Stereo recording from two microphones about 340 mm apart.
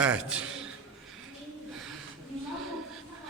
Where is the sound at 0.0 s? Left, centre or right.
Centre.